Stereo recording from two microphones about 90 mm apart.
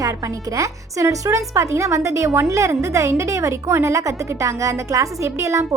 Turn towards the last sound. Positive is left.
turn(degrees=-35)  # may be behind; listen again after turning